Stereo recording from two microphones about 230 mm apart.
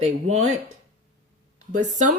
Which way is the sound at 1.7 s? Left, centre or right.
Right.